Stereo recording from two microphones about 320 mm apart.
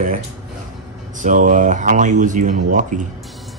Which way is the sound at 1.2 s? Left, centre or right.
Right.